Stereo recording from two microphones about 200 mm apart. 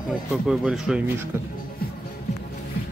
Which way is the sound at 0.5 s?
5° right (ahead or behind).